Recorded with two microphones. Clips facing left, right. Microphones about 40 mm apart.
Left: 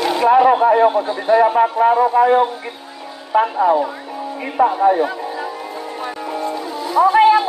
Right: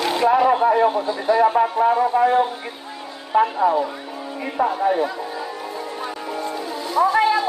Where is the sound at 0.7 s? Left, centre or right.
Left.